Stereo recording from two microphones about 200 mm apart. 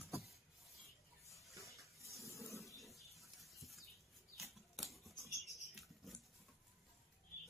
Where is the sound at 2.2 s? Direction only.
15° left (ahead or behind).